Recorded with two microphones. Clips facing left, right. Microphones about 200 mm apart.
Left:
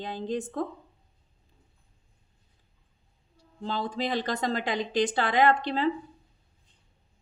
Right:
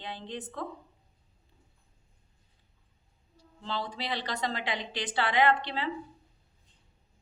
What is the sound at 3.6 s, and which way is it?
Speech, 45° left (ahead or behind).